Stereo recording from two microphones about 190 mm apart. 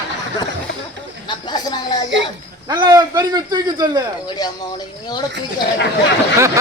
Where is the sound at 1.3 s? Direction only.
20° left (ahead or behind).